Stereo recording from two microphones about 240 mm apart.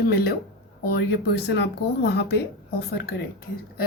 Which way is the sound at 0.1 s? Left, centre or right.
Left.